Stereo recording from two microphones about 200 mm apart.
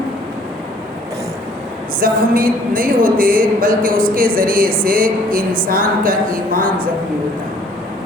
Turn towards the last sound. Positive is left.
turn(degrees=-45)  # may be behind; listen again after turning